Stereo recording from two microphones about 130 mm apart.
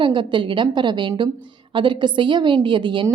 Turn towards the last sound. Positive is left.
turn(degrees=-40)  # may be behind; listen again after turning